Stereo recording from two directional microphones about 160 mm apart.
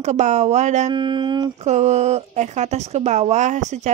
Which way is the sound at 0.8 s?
30° right (ahead or behind).